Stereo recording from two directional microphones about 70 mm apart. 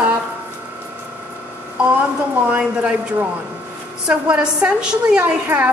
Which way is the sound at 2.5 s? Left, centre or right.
Centre.